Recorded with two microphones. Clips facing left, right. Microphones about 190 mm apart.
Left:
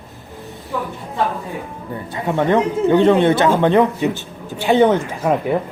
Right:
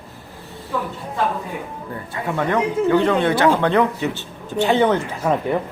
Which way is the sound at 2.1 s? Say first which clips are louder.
Left 5 dB; 20° left (ahead or behind).